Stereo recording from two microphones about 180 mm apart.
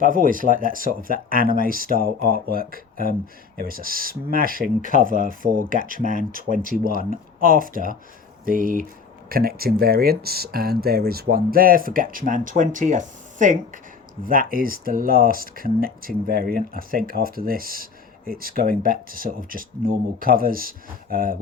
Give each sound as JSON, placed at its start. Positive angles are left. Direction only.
{"t": 0.0, "sound": "speech", "side_deg": -50}